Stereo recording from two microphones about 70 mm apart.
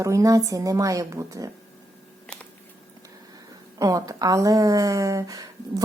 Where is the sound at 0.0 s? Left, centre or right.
Right.